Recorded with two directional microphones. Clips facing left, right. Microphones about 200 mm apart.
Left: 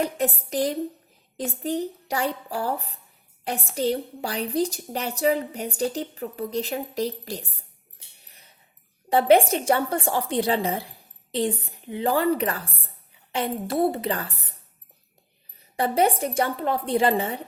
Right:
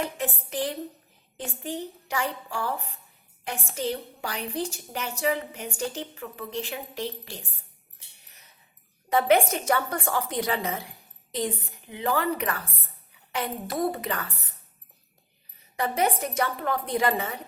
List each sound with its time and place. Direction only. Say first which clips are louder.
0.0 s a woman's voice: left 5 dB; 40° left (ahead or behind)
8.3 s a sound: left 2 dB; 30° left (ahead or behind)
9.0 s a woman's voice: left 4 dB; 30° left (ahead or behind)
15.7 s a woman's voice: left 4 dB; 30° left (ahead or behind)